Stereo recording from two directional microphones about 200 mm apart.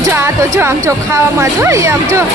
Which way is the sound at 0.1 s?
10° right (ahead or behind).